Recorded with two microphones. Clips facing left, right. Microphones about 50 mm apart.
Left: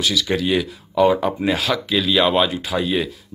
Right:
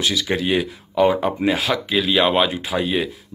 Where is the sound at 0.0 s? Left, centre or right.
Right.